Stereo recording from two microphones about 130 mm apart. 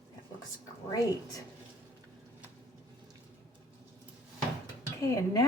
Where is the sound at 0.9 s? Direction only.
30° left (ahead or behind).